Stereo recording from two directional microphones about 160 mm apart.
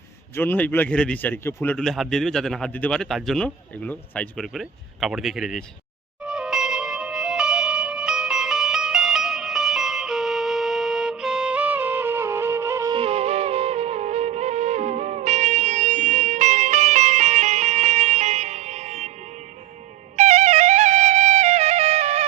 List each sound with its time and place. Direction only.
0.3 s a man's voice: 10° left (ahead or behind)
6.2 s music: 5° right (ahead or behind)
12.9 s music: 35° right (ahead or behind)
20.1 s music: 45° right (ahead or behind)